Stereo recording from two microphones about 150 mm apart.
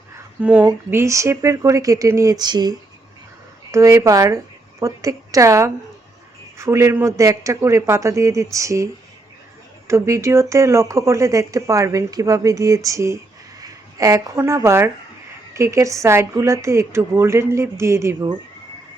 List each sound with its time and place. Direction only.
0.4 s speech: 10° right (ahead or behind)